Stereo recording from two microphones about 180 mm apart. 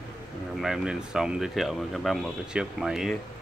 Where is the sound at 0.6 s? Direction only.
5° right (ahead or behind).